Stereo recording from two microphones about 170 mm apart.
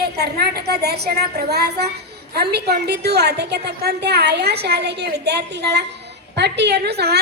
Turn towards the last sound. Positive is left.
turn(degrees=-70)  # may be behind; listen again after turning